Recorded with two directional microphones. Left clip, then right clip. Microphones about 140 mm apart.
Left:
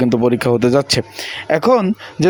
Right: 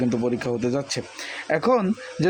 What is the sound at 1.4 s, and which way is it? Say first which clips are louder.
Speech: left 7 dB; 25° left (ahead or behind).